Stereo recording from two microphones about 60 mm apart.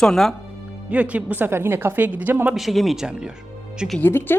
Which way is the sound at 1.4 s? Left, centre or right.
Right.